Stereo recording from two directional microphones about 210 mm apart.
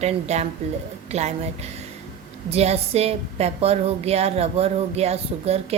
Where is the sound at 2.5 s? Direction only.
30° right (ahead or behind).